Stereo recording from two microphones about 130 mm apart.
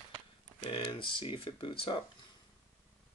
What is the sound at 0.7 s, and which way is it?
Speech, 40° left (ahead or behind).